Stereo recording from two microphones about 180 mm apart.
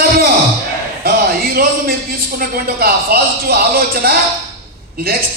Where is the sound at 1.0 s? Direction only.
60° right (ahead or behind).